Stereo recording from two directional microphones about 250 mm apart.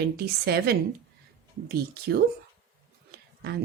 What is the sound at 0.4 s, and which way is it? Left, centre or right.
Speech, right.